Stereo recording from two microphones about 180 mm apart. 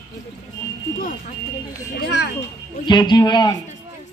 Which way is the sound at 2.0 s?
65° left (ahead or behind).